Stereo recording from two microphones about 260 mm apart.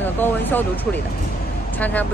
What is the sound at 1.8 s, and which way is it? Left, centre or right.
Speech, centre.